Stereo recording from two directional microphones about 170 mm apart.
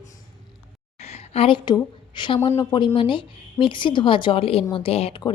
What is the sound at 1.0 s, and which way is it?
A woman's voice, 40° left (ahead or behind).